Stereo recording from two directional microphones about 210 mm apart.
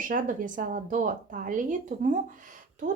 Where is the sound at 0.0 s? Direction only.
40° right (ahead or behind).